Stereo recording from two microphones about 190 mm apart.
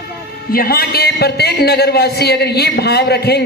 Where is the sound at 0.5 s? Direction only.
50° left (ahead or behind).